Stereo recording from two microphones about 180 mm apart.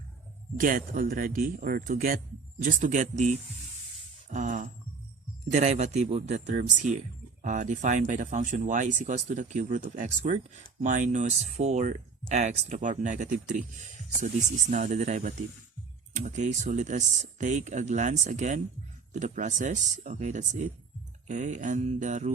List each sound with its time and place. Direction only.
0.5 s speech: 50° right (ahead or behind)